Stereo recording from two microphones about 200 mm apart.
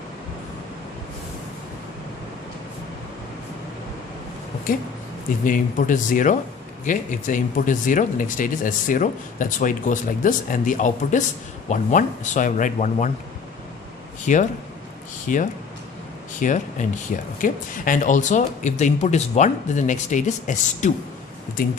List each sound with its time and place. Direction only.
4.7 s speech: 45° left (ahead or behind)
14.3 s speech: 40° left (ahead or behind)